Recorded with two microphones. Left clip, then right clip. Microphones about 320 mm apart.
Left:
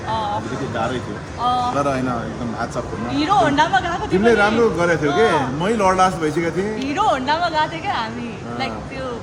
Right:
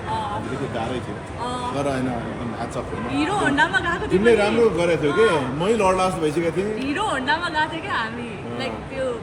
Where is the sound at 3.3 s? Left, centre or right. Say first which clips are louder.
Left 5 dB; centre.